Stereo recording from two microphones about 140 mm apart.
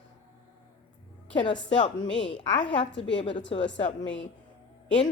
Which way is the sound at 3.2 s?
35° left (ahead or behind).